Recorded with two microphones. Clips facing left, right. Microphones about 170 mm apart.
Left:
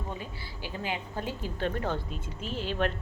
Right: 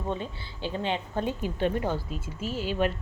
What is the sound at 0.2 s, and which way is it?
A woman's voice, 25° right (ahead or behind).